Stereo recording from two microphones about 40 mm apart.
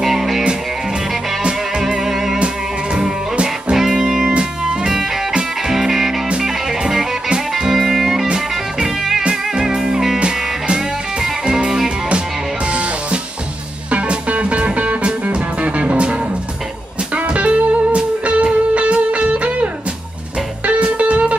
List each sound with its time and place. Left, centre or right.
0.0 s music: centre
2.0 s music: centre
2.3 s music: right
5.7 s music: centre
10.1 s music: right
13.8 s music: right